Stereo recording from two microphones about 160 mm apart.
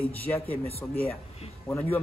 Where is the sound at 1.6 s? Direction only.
10° left (ahead or behind).